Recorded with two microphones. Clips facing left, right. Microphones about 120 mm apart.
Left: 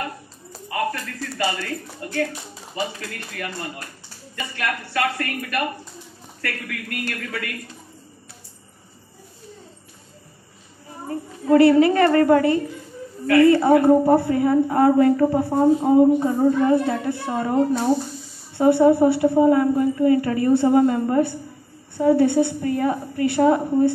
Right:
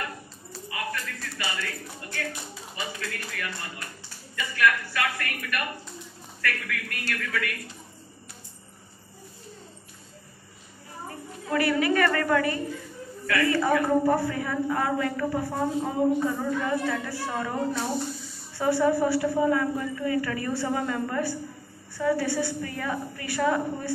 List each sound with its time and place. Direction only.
0.5 s a woman's voice: 40° left (ahead or behind)
11.1 s a woman's voice: 30° left (ahead or behind)
16.0 s a woman's voice: 25° left (ahead or behind)